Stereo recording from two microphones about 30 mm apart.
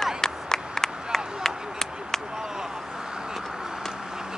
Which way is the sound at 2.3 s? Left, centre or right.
Centre.